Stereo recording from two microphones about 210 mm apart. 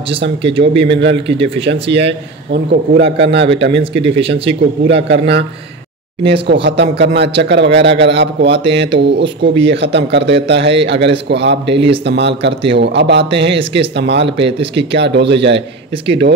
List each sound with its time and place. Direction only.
0.4 s speech: 25° right (ahead or behind)
0.7 s speech: 55° right (ahead or behind)